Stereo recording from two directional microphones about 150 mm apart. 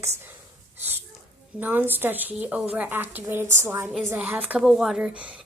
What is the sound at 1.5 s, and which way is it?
A woman's voice, 10° right (ahead or behind).